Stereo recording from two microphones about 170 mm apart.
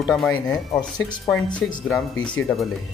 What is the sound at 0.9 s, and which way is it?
Speech, 25° left (ahead or behind).